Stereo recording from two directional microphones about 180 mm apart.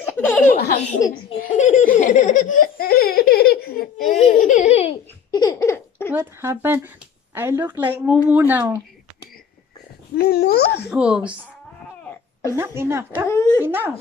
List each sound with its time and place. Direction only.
0.0 s laughter: 10° left (ahead or behind)
1.0 s speech: 20° left (ahead or behind)
1.4 s laughter: 45° left (ahead or behind)
4.1 s baby laughter: 45° left (ahead or behind)
5.4 s a sound: 20° left (ahead or behind)
6.1 s speech: 15° right (ahead or behind)
10.1 s a child's voice: 60° left (ahead or behind)
10.9 s speech: 5° right (ahead or behind)
12.1 s wail: 15° left (ahead or behind)
12.5 s speech: 15° right (ahead or behind)
13.3 s speech: 20° left (ahead or behind)
13.6 s speech: 10° right (ahead or behind)